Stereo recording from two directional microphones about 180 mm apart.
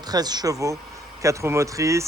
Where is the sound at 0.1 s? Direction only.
20° right (ahead or behind).